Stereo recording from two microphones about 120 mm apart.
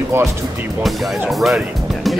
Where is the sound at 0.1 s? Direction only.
20° right (ahead or behind).